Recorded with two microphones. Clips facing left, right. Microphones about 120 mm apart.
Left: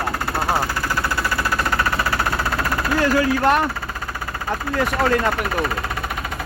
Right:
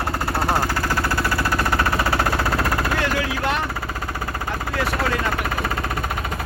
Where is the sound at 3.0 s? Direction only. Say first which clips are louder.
Left 6 dB; 45° left (ahead or behind).